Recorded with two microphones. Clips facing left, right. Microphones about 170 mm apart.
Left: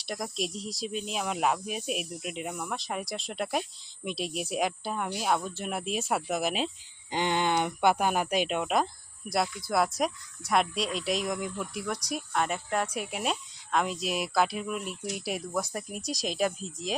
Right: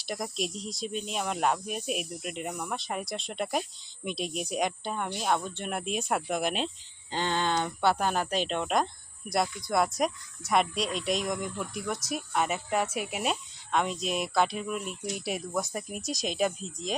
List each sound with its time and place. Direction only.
0.0 s speech: centre (ahead or behind)
7.1 s speech: 15° left (ahead or behind)